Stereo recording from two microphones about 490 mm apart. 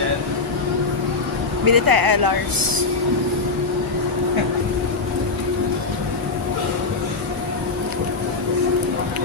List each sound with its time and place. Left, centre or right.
1.6 s speech: right